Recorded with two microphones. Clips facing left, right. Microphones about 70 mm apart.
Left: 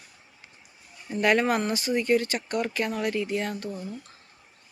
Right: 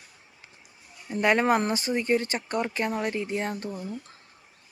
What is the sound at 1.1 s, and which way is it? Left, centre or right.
Speech, right.